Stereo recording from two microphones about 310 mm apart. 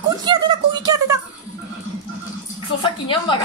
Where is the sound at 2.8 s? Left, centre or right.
Centre.